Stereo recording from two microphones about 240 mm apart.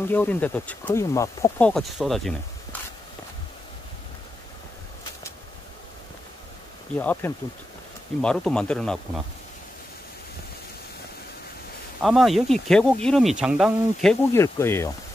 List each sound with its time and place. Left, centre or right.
0.1 s speech: centre
7.0 s speech: centre
12.0 s speech: centre
14.3 s speech: centre